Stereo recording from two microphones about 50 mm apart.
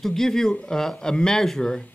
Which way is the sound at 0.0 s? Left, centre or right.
Centre.